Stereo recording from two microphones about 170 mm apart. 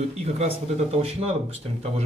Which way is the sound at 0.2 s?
40° right (ahead or behind).